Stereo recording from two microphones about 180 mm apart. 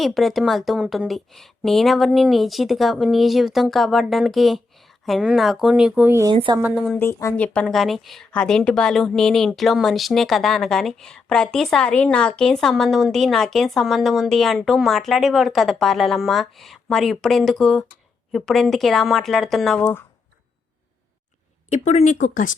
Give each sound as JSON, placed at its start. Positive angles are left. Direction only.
{"t": 0.0, "sound": "speech", "side_deg": 0}
{"t": 6.3, "sound": "a woman's voice", "side_deg": -30}
{"t": 6.6, "sound": "a woman's voice", "side_deg": -10}
{"t": 7.0, "sound": "speech", "side_deg": 15}
{"t": 21.7, "sound": "speech", "side_deg": 35}